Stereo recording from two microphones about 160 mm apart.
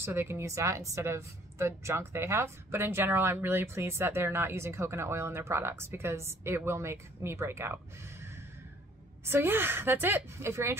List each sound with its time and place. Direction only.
0.0 s a woman's voice: 15° right (ahead or behind)